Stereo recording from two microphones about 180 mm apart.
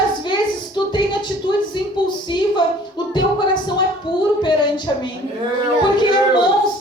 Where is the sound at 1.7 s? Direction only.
25° left (ahead or behind).